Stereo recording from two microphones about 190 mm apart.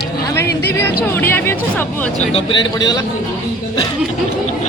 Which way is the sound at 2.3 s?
20° left (ahead or behind).